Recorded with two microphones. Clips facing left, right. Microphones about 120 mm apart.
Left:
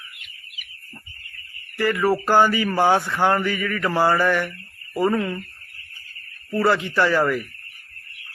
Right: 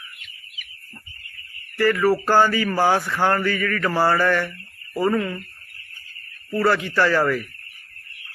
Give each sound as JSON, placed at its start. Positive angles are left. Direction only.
{"t": 1.8, "sound": "speech", "side_deg": 20}
{"t": 6.6, "sound": "speech", "side_deg": 20}